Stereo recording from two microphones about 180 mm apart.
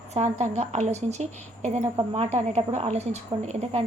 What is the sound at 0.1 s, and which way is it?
A woman's voice, 40° right (ahead or behind).